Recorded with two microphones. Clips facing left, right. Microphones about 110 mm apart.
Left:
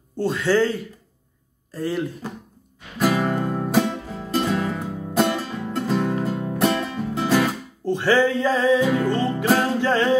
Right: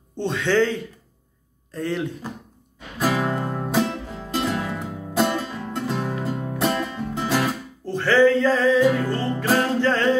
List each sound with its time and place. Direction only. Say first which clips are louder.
0.1 s speech: left 1 dB; 5° left (ahead or behind)
3.0 s music: left 2 dB; 5° right (ahead or behind)
7.8 s music: right 2 dB; 15° left (ahead or behind)